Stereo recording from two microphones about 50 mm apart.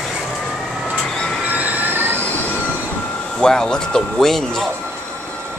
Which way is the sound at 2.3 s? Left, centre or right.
Left.